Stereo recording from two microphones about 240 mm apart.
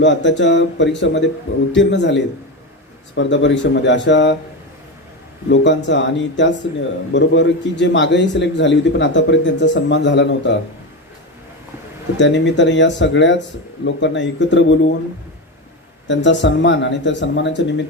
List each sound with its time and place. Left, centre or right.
0.0 s a man's voice: left
5.5 s a man's voice: left
12.1 s a man's voice: left
16.0 s a man's voice: left